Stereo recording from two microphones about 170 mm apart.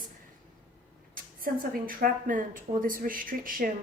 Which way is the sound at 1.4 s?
55° right (ahead or behind).